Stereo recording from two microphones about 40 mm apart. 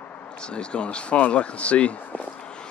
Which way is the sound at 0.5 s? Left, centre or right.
Left.